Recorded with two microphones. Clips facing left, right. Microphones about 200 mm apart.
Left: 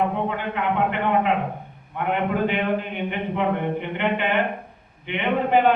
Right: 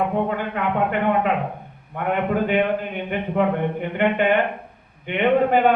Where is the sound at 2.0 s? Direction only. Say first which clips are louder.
Right 1 dB; 45° right (ahead or behind).